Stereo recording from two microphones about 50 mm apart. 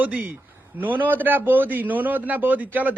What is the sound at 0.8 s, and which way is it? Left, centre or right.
A man's voice, right.